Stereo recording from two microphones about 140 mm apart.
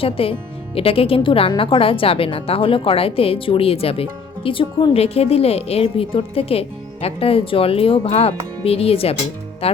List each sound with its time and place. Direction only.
0.0 s a woman's voice: 40° left (ahead or behind)